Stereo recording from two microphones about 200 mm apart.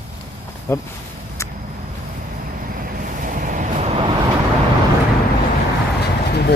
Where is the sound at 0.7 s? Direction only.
15° left (ahead or behind).